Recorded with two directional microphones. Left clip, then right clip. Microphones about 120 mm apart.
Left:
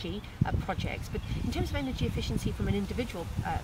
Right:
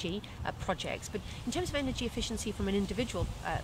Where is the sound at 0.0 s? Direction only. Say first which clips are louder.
Left 1 dB; 35° right (ahead or behind).